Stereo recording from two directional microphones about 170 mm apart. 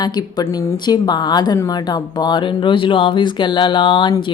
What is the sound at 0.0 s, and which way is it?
A woman's voice, 25° left (ahead or behind).